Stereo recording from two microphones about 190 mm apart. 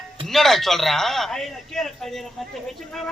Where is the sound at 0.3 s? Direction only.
Centre (ahead or behind).